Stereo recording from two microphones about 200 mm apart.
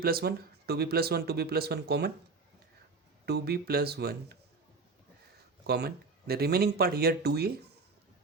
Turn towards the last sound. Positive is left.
turn(degrees=-55)  # may be behind; listen again after turning